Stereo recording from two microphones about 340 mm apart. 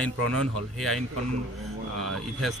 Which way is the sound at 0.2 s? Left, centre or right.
Right.